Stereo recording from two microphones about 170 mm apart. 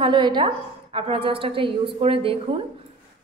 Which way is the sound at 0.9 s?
30° right (ahead or behind).